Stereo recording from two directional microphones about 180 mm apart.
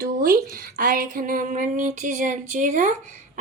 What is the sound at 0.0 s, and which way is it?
Speech, 50° right (ahead or behind).